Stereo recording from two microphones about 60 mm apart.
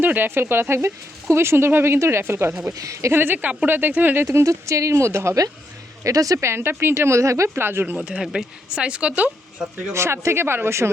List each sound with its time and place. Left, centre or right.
0.0 s speech: right
2.7 s speech: right
3.1 s speech: right
4.4 s speech: right
6.0 s speech: right
6.4 s speech: right
7.6 s speech: right
7.9 s speech: centre
9.9 s speech: right